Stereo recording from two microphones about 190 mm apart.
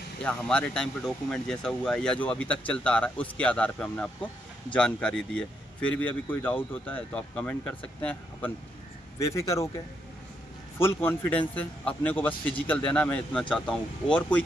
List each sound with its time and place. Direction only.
0.2 s speech: 5° left (ahead or behind)
10.8 s speech: 10° left (ahead or behind)